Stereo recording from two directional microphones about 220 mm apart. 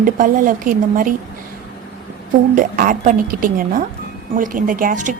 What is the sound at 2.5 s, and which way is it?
A woman's voice, 40° right (ahead or behind).